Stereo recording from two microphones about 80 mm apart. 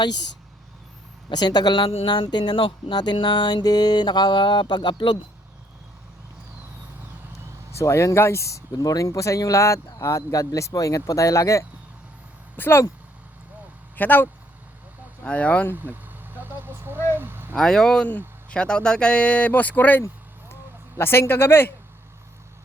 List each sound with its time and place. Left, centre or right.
1.3 s speech: left
7.7 s speech: left
12.5 s speech: left
13.9 s speech: left
15.7 s vehicle: right
17.2 s a sound: right
17.5 s speech: centre; by 21.7 s left